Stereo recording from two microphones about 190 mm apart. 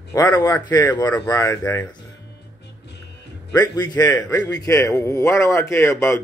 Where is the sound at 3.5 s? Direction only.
20° left (ahead or behind).